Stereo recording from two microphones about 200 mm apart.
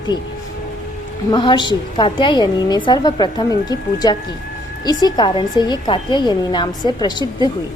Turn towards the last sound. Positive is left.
turn(degrees=20)  # may be behind; listen again after turning